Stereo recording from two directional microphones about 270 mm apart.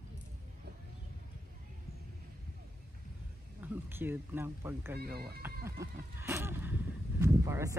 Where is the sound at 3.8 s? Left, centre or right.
Centre.